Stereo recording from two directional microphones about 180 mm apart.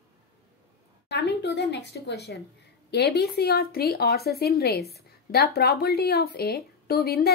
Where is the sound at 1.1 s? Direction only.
70° left (ahead or behind).